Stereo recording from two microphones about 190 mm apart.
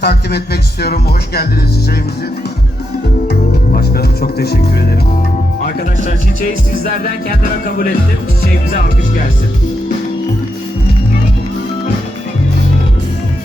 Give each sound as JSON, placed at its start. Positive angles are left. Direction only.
{"t": 0.0, "sound": "speech", "side_deg": 60}
{"t": 3.2, "sound": "music", "side_deg": 55}
{"t": 4.4, "sound": "speech", "side_deg": 60}